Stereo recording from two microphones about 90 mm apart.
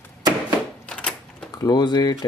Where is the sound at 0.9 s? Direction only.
10° left (ahead or behind).